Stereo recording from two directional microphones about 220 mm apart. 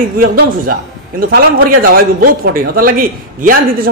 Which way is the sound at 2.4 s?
40° right (ahead or behind).